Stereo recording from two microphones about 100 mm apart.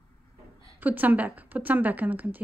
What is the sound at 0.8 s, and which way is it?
A woman's voice, 15° right (ahead or behind).